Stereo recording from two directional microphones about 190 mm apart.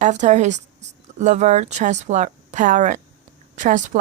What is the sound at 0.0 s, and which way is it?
A woman's voice, 40° right (ahead or behind).